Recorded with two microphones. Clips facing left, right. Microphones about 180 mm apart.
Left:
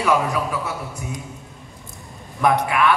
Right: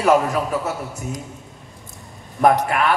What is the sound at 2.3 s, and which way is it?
Speech, 45° right (ahead or behind).